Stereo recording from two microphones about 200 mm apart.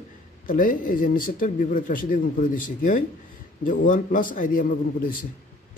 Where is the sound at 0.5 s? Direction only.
45° left (ahead or behind).